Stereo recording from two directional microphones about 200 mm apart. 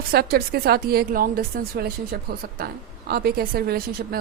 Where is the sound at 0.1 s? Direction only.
50° right (ahead or behind).